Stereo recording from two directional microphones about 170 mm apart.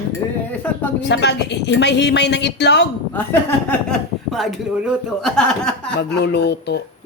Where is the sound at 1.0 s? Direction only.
90° left.